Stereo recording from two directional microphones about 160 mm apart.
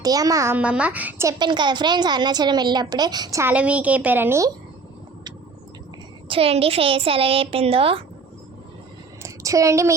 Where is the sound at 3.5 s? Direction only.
10° right (ahead or behind).